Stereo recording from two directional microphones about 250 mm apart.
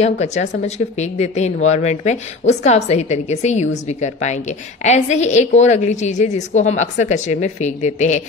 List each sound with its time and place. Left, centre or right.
0.0 s speech: left